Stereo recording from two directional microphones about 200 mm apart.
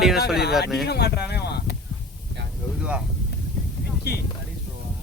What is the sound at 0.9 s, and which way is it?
Speech, 55° left (ahead or behind).